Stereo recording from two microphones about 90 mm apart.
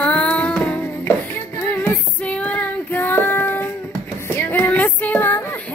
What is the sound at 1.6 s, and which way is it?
Female singing, 20° left (ahead or behind).